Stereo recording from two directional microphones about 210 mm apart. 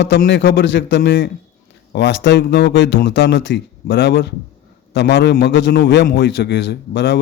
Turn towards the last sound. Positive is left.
turn(degrees=55)  # may be behind; listen again after turning